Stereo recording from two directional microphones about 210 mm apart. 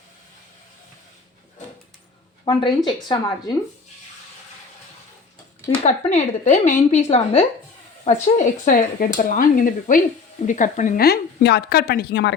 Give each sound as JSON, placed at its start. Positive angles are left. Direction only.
{"t": 2.4, "sound": "speech", "side_deg": 20}
{"t": 5.8, "sound": "a woman's voice", "side_deg": 30}